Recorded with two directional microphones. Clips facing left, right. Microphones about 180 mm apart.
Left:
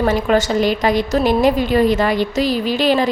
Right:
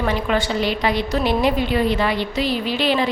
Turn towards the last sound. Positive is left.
turn(degrees=45)  # may be behind; listen again after turning